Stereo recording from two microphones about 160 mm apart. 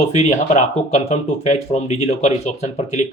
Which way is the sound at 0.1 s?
45° left (ahead or behind).